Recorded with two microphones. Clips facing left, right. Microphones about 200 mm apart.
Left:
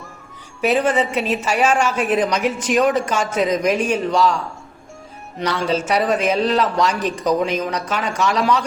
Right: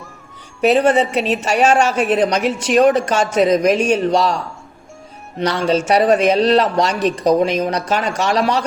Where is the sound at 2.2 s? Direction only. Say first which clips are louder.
Right 3 dB; 35° right (ahead or behind).